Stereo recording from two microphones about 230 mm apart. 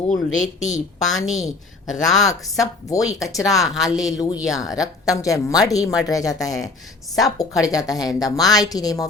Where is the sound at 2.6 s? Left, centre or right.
Centre.